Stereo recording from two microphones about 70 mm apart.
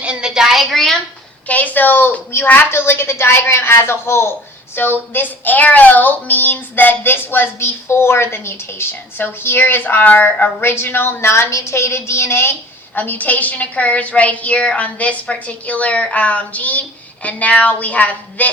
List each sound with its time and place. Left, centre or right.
0.0 s a sound: centre
1.5 s speech: left
13.0 s a woman's voice: left